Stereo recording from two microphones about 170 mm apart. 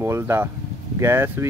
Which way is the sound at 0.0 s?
15° right (ahead or behind).